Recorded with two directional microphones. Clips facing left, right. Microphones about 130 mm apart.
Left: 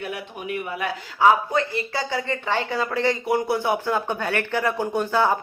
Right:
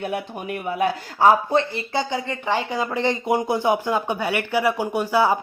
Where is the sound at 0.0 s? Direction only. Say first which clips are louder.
Right 4 dB; 40° right (ahead or behind).